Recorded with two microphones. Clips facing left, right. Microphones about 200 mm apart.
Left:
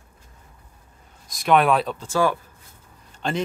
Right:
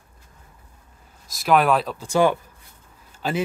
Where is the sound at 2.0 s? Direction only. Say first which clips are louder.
Right 4 dB; 15° right (ahead or behind).